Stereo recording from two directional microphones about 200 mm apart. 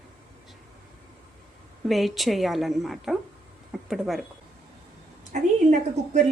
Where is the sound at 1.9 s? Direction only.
Centre (ahead or behind).